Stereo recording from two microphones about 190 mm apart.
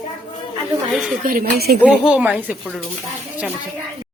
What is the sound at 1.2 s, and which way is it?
Speech, 50° right (ahead or behind).